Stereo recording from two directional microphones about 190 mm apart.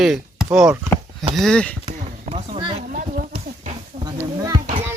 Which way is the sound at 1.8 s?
30° right (ahead or behind).